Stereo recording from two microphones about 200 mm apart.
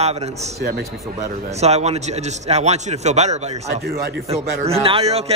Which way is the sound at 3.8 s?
55° right (ahead or behind).